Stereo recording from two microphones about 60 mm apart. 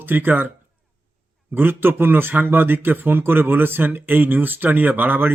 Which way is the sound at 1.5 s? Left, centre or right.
Right.